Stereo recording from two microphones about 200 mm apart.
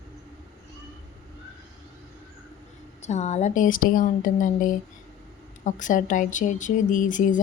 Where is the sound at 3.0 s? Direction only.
35° left (ahead or behind).